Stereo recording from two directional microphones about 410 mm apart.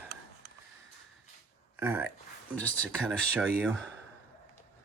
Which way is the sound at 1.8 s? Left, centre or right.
Centre.